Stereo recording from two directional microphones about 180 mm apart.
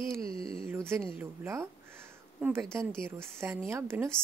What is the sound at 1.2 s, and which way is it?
Speech, 15° right (ahead or behind).